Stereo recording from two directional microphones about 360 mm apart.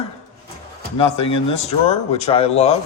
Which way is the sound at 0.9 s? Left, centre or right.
Centre.